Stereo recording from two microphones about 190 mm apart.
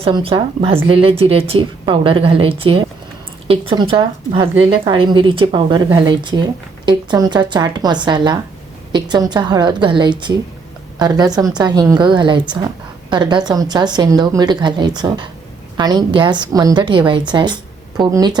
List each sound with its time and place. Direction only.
0.0 s a woman's voice: 30° right (ahead or behind)